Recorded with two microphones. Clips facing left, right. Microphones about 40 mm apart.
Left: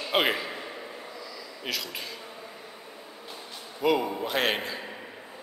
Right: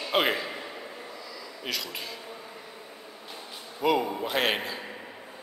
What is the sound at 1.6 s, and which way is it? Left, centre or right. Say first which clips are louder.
Speech: even; centre.